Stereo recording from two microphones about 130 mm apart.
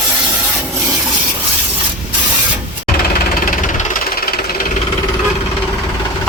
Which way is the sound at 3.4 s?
75° left (ahead or behind).